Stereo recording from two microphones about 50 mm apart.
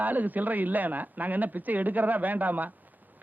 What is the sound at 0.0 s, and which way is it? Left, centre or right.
A man's voice, right.